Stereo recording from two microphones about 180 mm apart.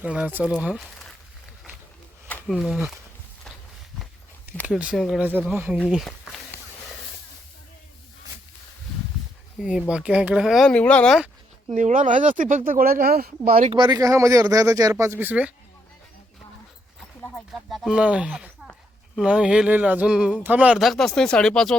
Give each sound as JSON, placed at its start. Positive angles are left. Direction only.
{"t": 0.0, "sound": "speech", "side_deg": -5}
{"t": 2.2, "sound": "a sound", "side_deg": 10}
{"t": 2.6, "sound": "speech", "side_deg": -5}
{"t": 4.6, "sound": "speech", "side_deg": -5}
{"t": 9.6, "sound": "speech", "side_deg": -5}
{"t": 11.7, "sound": "speech", "side_deg": -45}
{"t": 13.7, "sound": "speech", "side_deg": -25}
{"t": 17.2, "sound": "a sound", "side_deg": 5}
{"t": 19.1, "sound": "speech", "side_deg": -5}